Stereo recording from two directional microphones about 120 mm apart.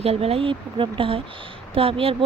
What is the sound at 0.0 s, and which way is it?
Speech, 55° right (ahead or behind).